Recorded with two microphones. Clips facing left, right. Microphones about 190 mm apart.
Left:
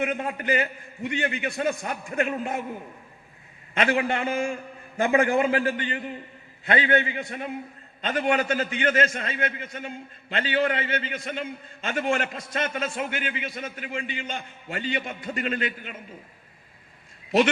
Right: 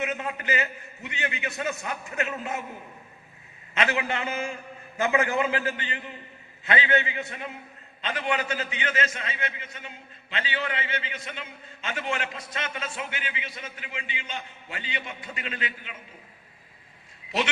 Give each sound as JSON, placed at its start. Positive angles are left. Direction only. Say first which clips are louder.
{"t": 0.0, "sound": "a man's voice", "louder": "left 3 dB", "side_deg": 50}
{"t": 3.8, "sound": "a man's voice", "louder": "left 4 dB", "side_deg": 50}